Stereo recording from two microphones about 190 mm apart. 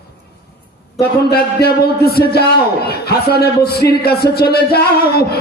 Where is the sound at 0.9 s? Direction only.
55° left (ahead or behind).